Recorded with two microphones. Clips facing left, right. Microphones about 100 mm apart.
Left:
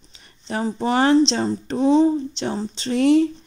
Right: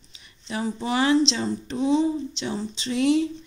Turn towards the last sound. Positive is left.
turn(degrees=45)  # may be behind; listen again after turning